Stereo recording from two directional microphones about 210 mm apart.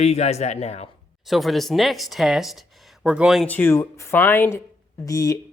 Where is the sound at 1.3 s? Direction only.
Centre (ahead or behind).